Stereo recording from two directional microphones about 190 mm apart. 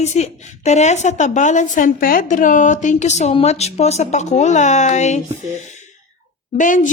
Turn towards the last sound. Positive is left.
turn(degrees=45)  # may be behind; listen again after turning